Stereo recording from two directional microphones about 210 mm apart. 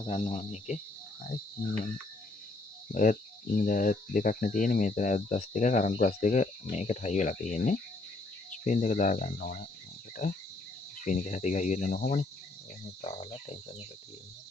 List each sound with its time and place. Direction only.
0.0 s speech: 30° left (ahead or behind)
2.9 s speech: 40° left (ahead or behind)